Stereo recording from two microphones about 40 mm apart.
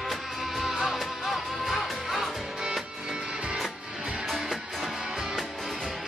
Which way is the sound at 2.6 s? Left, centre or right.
Centre.